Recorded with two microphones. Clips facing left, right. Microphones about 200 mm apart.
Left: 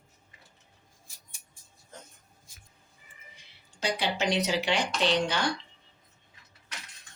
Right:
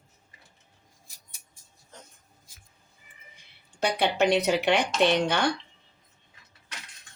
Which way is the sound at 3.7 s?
60° right (ahead or behind).